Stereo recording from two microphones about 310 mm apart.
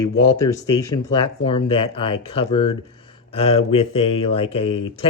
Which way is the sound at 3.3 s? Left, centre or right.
Centre.